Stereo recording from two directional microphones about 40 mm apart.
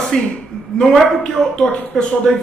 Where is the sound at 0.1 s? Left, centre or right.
Centre.